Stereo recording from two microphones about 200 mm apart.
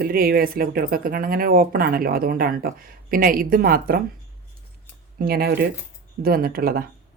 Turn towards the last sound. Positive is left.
turn(degrees=-50)  # may be behind; listen again after turning